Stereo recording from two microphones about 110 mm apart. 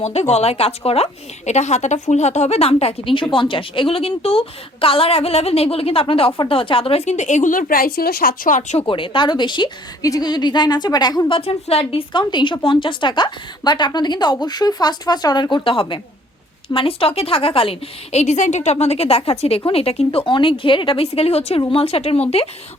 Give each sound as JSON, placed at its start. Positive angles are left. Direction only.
{"t": 0.0, "sound": "a woman's voice", "side_deg": 75}
{"t": 8.8, "sound": "speech", "side_deg": 50}
{"t": 10.0, "sound": "speech", "side_deg": 35}
{"t": 11.3, "sound": "a woman's voice", "side_deg": 60}
{"t": 20.1, "sound": "a woman's voice", "side_deg": 50}